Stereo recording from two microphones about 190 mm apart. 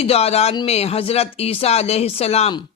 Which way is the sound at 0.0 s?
30° left (ahead or behind).